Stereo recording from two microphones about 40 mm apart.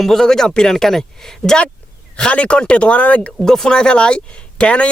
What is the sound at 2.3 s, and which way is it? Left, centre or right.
Speech, left.